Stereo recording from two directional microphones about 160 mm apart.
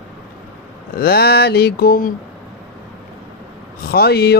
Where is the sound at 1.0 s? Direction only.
75° left (ahead or behind).